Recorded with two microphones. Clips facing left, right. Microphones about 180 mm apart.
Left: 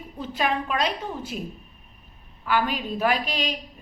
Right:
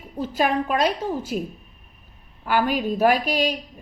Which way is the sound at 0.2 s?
45° right (ahead or behind).